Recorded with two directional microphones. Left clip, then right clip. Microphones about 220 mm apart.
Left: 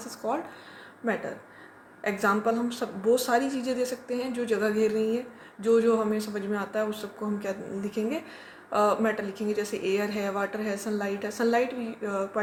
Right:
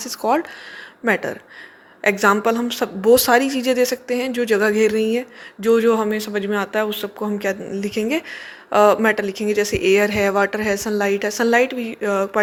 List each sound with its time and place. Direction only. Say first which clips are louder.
0.0 s a woman's voice: right 11 dB; 40° right (ahead or behind)